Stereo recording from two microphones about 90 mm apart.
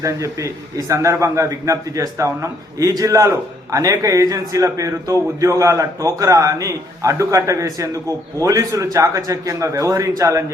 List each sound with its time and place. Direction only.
0.0 s a man's voice: 35° right (ahead or behind)